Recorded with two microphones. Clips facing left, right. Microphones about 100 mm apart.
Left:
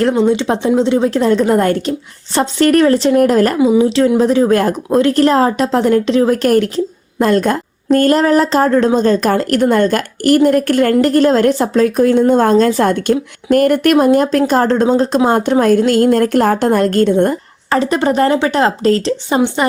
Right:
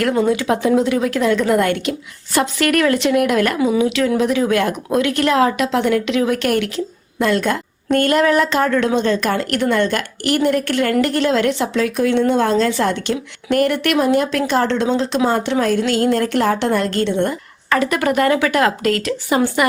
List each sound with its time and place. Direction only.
0.1 s a woman's voice: 25° left (ahead or behind); by 17.3 s 45° left (ahead or behind)
17.7 s a woman's voice: 30° left (ahead or behind)